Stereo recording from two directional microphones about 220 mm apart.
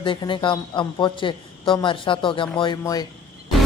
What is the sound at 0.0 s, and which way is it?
A man's voice, 20° left (ahead or behind).